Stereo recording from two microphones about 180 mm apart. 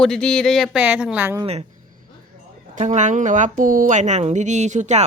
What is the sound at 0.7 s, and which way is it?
Speech, 10° right (ahead or behind).